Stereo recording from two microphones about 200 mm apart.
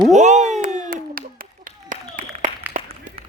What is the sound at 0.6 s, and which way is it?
Clapping, 40° right (ahead or behind).